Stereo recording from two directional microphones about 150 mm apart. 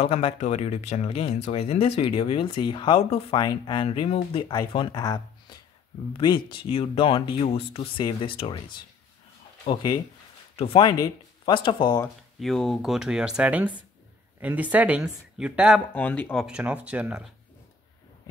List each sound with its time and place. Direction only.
0.0 s speech: 40° left (ahead or behind)
9.7 s speech: 30° left (ahead or behind)
12.4 s speech: centre (ahead or behind)
15.9 s speech: 10° left (ahead or behind)
16.4 s speech: 10° right (ahead or behind)